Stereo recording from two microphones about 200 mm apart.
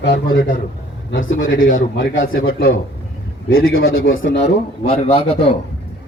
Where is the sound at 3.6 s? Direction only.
90° left; by 4.5 s 65° left (ahead or behind).